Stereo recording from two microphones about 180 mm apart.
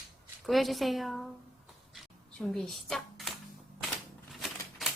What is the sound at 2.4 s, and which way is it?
Speech, centre (ahead or behind).